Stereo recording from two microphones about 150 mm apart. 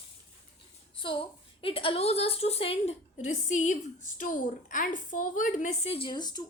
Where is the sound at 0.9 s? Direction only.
35° left (ahead or behind); by 5.9 s 55° left (ahead or behind).